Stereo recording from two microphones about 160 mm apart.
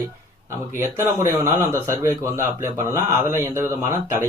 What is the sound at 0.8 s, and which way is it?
Speech, 20° right (ahead or behind).